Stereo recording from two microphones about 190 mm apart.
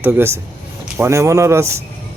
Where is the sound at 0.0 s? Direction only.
10° right (ahead or behind).